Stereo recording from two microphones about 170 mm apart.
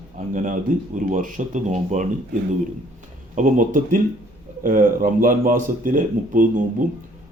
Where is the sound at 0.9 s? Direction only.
50° right (ahead or behind).